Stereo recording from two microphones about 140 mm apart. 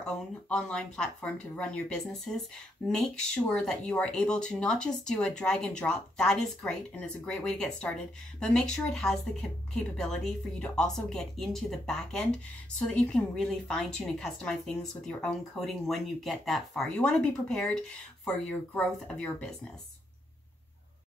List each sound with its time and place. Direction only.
0.0 s a woman's voice: 5° left (ahead or behind)